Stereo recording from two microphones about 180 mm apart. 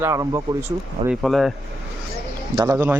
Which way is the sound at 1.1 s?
Centre (ahead or behind).